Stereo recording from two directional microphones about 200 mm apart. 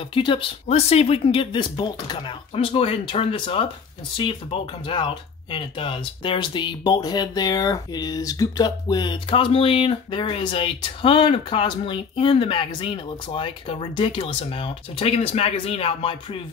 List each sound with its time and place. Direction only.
0.1 s speech: 25° left (ahead or behind)